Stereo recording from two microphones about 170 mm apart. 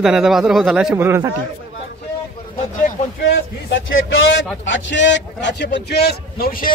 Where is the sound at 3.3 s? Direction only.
90° left.